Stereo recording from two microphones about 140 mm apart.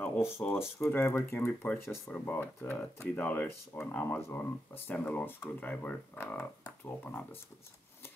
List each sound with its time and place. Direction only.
0.0 s speech: 15° left (ahead or behind)